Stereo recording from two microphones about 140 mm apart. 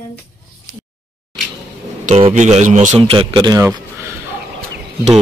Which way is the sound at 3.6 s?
20° right (ahead or behind).